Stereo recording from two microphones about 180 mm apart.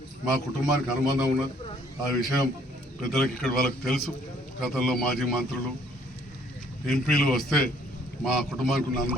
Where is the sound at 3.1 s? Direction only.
Centre (ahead or behind).